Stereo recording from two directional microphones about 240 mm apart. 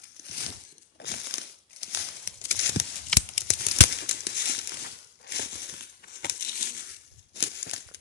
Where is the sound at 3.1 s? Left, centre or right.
Centre.